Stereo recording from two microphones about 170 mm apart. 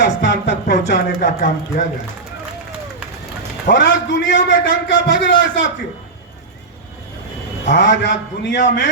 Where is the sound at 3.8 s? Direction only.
55° left (ahead or behind).